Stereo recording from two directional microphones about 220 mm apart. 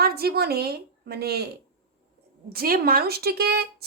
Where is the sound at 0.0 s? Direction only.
45° right (ahead or behind).